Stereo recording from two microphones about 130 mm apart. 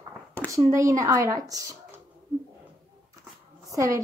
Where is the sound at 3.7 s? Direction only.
25° right (ahead or behind).